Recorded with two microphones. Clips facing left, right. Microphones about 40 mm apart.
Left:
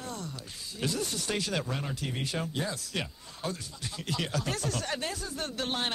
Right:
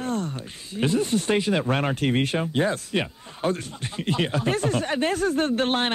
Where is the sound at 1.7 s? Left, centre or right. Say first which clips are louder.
Right 12 dB; right.